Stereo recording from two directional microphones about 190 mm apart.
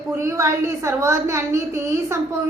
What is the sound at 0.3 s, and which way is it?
A child's voice, 15° right (ahead or behind).